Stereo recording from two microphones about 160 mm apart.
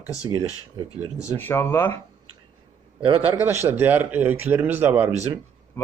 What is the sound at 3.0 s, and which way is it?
Speech, 35° right (ahead or behind).